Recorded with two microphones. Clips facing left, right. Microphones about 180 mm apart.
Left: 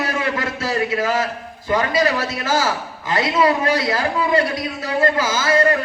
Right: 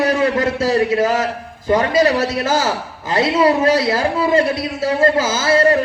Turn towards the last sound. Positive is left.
turn(degrees=-30)  # may be behind; listen again after turning